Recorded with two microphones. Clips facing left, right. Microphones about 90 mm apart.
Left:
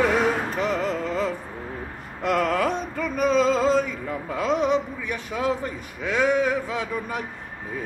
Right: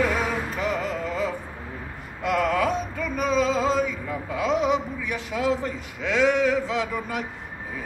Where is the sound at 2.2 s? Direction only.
55° left (ahead or behind).